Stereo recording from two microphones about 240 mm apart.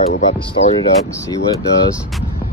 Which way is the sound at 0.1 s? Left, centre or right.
Left.